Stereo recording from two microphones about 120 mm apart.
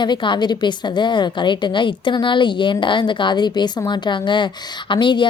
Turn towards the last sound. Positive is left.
turn(degrees=40)  # may be behind; listen again after turning